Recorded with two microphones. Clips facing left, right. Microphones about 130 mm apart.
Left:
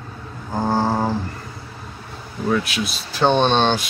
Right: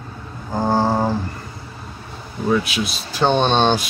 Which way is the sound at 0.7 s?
15° right (ahead or behind).